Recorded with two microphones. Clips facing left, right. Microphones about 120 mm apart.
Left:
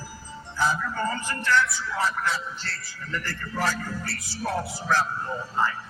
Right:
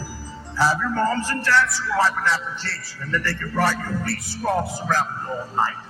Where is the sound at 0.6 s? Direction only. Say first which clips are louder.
Right 5 dB; 85° right; by 5.0 s 50° right (ahead or behind).